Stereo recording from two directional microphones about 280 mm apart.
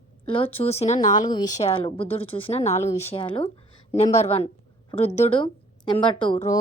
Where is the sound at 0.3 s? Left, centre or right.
Centre.